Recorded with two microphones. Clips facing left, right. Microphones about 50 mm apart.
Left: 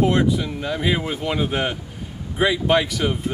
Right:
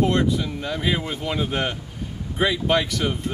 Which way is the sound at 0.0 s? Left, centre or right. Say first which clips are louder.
Left 2 dB; centre.